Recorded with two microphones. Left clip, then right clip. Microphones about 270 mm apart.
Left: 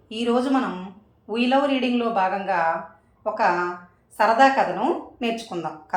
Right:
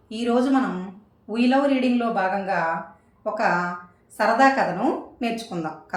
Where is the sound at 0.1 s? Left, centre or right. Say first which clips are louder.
Even; centre.